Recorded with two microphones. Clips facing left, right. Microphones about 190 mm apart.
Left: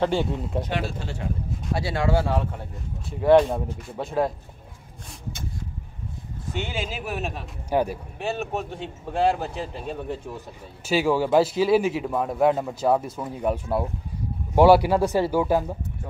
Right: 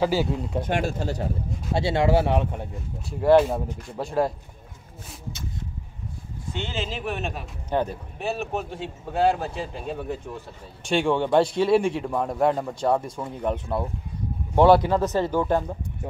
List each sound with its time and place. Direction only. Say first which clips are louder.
0.0 s speech: right 1 dB; 5° right (ahead or behind)
0.7 s speech: right 4 dB; 45° right (ahead or behind)
1.7 s speech: right 3 dB; 25° right (ahead or behind)
3.1 s speech: even; centre (ahead or behind)
6.5 s speech: even; 10° left (ahead or behind)
8.2 s speech: even; centre (ahead or behind)